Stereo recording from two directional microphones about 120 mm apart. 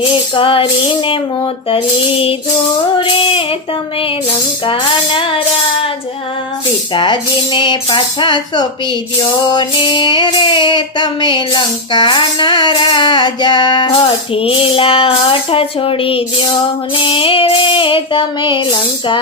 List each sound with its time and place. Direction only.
0.3 s speech: 50° left (ahead or behind)
2.9 s speech: 45° left (ahead or behind)
4.6 s speech: 45° left (ahead or behind)
6.9 s music: 40° left (ahead or behind)
14.3 s speech: 50° left (ahead or behind)